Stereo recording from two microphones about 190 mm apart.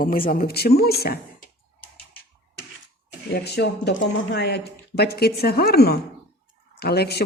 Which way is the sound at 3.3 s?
60° left (ahead or behind).